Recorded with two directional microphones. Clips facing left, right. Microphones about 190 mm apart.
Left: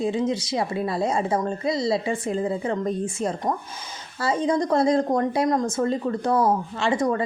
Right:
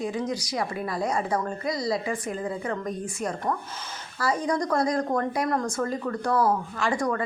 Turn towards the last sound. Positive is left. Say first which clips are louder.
# left 4 dB
turn(degrees=25)  # may be behind; listen again after turning